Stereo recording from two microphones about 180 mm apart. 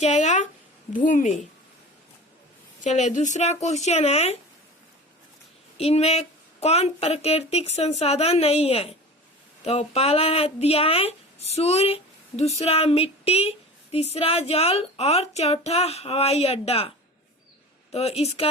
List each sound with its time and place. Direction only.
0.0 s a sound: 40° left (ahead or behind)
0.9 s a woman's voice: 45° left (ahead or behind)
2.8 s speech: 40° left (ahead or behind)
5.7 s speech: 35° left (ahead or behind)
17.9 s speech: 35° left (ahead or behind)